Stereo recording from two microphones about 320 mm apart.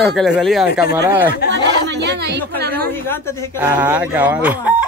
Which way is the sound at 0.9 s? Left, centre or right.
Centre.